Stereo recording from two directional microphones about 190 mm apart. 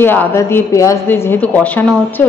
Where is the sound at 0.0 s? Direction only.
10° left (ahead or behind).